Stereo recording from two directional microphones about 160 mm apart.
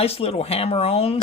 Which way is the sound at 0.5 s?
40° left (ahead or behind).